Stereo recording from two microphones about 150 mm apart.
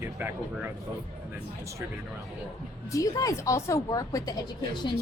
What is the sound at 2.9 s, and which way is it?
A woman's voice, 20° left (ahead or behind).